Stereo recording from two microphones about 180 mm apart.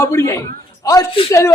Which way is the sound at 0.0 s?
15° left (ahead or behind).